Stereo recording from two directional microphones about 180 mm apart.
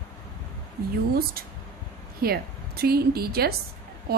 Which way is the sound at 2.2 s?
60° right (ahead or behind).